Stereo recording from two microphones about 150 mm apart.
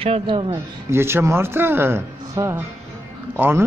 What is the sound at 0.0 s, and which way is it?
Speech, 35° right (ahead or behind).